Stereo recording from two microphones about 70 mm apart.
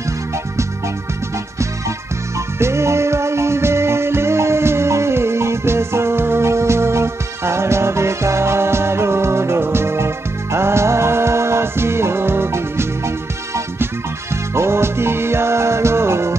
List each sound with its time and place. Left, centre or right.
2.3 s music: right
14.3 s music: right